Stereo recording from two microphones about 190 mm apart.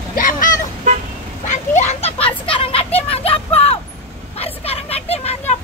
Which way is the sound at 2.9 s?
30° left (ahead or behind).